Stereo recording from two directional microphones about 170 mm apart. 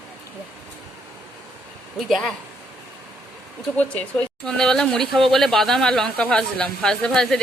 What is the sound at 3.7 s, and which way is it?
Speech, 5° left (ahead or behind).